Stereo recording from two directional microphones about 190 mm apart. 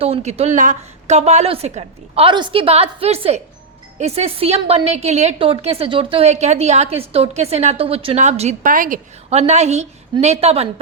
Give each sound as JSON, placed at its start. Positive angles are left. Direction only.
{"t": 0.0, "sound": "a woman's voice", "side_deg": -35}